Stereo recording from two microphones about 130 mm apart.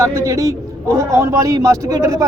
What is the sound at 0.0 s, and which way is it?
Speech, 20° right (ahead or behind).